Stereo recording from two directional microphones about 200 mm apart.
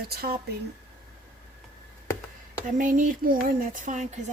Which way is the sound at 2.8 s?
40° right (ahead or behind).